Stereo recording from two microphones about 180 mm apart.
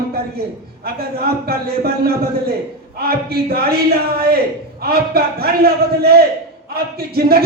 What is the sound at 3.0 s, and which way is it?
A man's voice, 55° right (ahead or behind).